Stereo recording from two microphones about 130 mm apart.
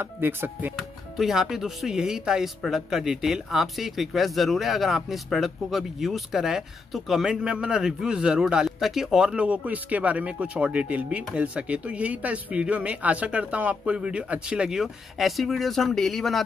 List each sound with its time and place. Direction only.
0.0 s speech: 15° right (ahead or behind)
1.1 s speech: centre (ahead or behind)